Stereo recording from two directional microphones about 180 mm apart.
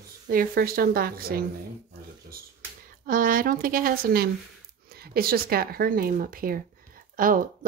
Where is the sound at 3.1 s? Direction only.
50° right (ahead or behind).